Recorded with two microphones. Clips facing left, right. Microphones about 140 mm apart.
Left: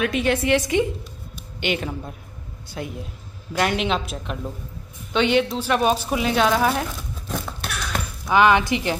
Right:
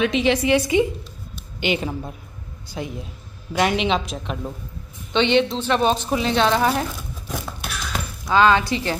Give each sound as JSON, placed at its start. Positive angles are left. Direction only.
{"t": 0.0, "sound": "a woman's voice", "side_deg": 5}
{"t": 6.7, "sound": "a sound", "side_deg": -5}
{"t": 8.3, "sound": "speech", "side_deg": 15}